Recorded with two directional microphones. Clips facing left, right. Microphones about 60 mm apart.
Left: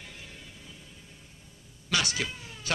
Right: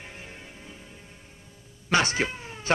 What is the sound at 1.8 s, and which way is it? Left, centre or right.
Cat, right.